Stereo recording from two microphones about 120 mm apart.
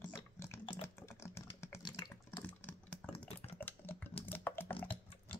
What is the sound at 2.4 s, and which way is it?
Typing, 15° left (ahead or behind).